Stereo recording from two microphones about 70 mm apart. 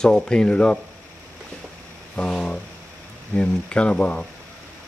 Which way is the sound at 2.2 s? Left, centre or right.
Centre.